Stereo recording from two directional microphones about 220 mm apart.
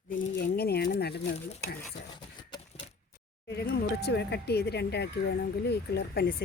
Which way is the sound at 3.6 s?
45° left (ahead or behind).